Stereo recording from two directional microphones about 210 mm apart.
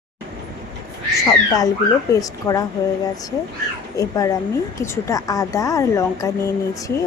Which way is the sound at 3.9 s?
15° left (ahead or behind).